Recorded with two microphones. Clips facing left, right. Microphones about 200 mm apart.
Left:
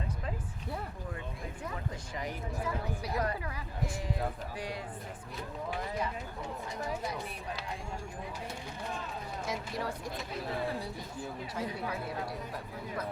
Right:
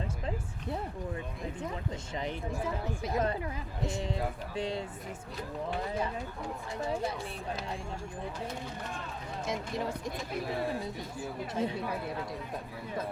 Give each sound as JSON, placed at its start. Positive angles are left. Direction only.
{"t": 2.1, "sound": "speech", "side_deg": -25}
{"t": 9.5, "sound": "speech", "side_deg": -20}
{"t": 11.6, "sound": "speech", "side_deg": -25}